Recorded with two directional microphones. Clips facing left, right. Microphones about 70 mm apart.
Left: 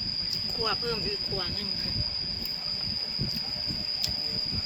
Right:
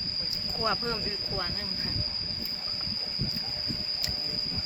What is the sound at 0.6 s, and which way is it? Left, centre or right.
Cricket, right.